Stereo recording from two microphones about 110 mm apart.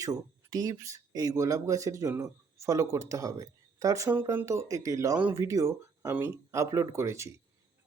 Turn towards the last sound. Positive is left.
turn(degrees=-25)  # may be behind; listen again after turning